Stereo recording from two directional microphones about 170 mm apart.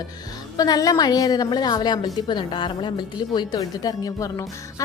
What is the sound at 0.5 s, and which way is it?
A woman's voice, 20° left (ahead or behind).